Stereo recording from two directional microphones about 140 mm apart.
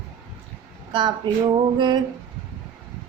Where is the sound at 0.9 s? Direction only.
35° right (ahead or behind).